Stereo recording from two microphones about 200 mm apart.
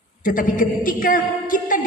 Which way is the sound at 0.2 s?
45° left (ahead or behind).